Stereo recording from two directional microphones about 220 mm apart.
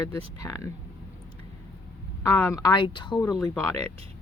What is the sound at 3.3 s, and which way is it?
Speech, 5° left (ahead or behind).